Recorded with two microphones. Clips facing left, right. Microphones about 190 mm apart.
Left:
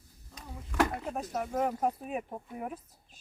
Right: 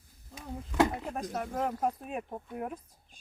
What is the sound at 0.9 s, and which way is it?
Speech, centre (ahead or behind).